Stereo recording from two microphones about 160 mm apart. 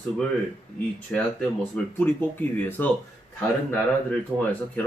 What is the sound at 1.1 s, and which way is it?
Speech, 10° left (ahead or behind).